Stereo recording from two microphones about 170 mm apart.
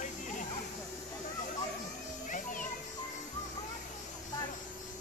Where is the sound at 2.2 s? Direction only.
50° left (ahead or behind).